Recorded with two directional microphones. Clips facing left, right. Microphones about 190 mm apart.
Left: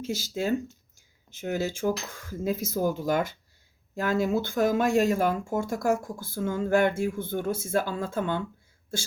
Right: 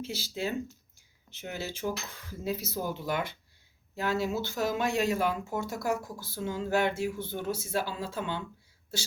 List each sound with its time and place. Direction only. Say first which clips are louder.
0.0 s speech: left 5 dB; 45° left (ahead or behind)